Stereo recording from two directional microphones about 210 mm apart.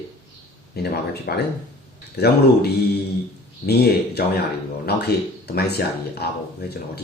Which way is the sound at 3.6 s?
50° left (ahead or behind).